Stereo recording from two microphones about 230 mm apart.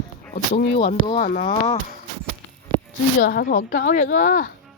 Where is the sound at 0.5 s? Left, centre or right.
Left.